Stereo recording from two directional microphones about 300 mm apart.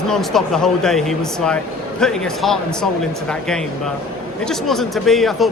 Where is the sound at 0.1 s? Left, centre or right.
Centre.